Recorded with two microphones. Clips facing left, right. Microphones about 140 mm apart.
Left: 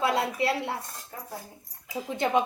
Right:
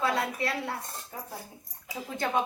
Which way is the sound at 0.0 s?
25° left (ahead or behind).